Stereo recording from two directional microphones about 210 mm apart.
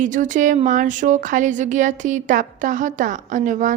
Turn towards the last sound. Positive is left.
turn(degrees=-35)  # may be behind; listen again after turning